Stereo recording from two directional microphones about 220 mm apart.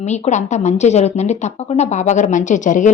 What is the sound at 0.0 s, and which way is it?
Speech, 30° left (ahead or behind).